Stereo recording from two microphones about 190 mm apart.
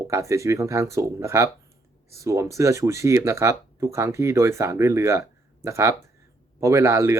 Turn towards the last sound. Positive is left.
turn(degrees=-15)  # may be behind; listen again after turning